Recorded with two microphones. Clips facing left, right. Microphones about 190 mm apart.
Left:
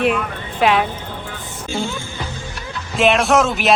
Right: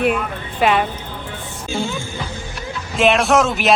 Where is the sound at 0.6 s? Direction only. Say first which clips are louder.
Even; centre (ahead or behind).